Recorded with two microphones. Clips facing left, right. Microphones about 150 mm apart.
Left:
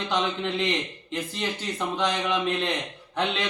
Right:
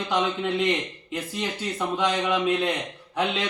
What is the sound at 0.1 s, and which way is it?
A man's voice, 5° right (ahead or behind).